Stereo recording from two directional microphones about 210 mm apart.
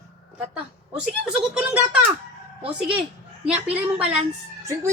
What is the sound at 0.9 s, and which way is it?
Speech, 5° right (ahead or behind).